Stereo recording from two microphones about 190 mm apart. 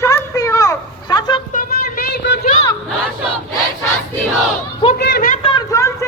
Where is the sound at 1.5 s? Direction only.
50° left (ahead or behind).